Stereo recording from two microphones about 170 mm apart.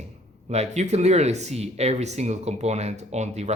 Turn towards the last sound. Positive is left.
turn(degrees=-40)  # may be behind; listen again after turning